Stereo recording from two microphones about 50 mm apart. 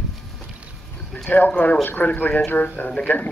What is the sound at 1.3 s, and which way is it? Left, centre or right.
Speech, left.